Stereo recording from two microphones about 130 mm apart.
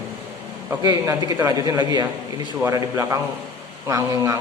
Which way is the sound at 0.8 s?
30° right (ahead or behind).